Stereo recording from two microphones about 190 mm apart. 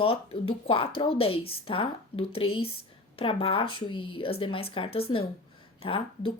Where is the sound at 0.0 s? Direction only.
30° left (ahead or behind).